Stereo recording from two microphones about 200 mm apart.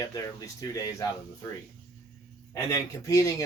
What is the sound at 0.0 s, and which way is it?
Speech, 15° left (ahead or behind).